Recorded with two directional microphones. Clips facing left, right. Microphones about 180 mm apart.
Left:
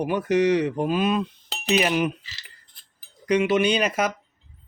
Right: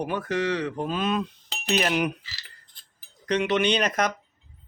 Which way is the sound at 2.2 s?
20° left (ahead or behind).